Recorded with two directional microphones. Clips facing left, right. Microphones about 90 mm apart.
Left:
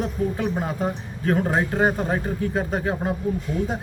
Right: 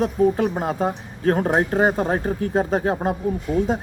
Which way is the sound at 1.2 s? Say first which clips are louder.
Right 3 dB; 40° right (ahead or behind).